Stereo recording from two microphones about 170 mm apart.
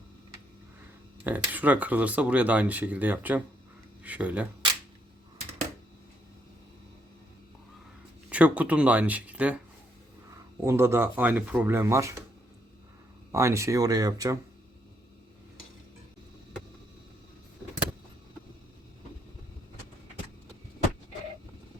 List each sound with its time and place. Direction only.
1.2 s speech: 10° right (ahead or behind)
8.3 s speech: 10° right (ahead or behind)
10.6 s speech: 15° right (ahead or behind)
13.3 s speech: 15° right (ahead or behind)